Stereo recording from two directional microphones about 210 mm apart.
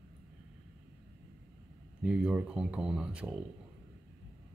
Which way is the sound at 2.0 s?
5° right (ahead or behind).